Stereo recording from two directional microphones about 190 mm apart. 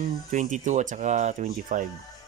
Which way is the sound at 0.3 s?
40° right (ahead or behind).